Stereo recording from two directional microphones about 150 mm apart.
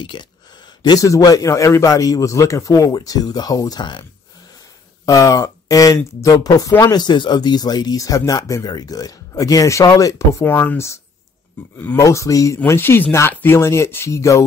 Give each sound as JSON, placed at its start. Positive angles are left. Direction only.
{"t": 0.0, "sound": "speech", "side_deg": 30}
{"t": 5.0, "sound": "speech", "side_deg": 20}